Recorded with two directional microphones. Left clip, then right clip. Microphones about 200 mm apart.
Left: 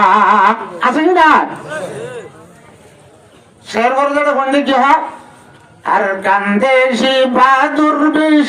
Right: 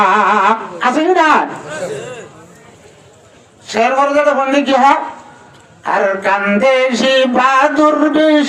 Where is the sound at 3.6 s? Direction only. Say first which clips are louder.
Right 1 dB; 15° right (ahead or behind).